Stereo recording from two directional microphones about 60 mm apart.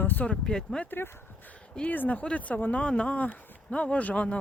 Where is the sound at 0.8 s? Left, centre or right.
Left.